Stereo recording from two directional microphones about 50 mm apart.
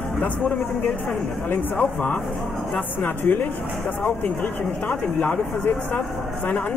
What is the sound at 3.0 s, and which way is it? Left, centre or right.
Speech, left.